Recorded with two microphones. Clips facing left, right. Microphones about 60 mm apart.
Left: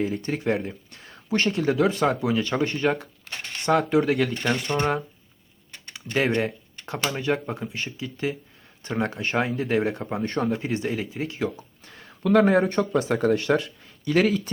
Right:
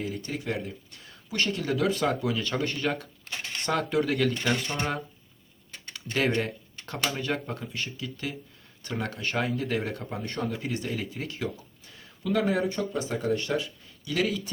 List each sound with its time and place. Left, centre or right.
0.0 s speech: left
4.6 s speech: left
5.9 s speech: centre
6.4 s a sound: centre
7.1 s speech: centre
12.2 s speech: left
14.0 s speech: left